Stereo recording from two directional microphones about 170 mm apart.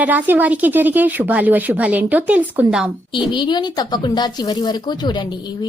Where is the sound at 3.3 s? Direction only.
25° left (ahead or behind).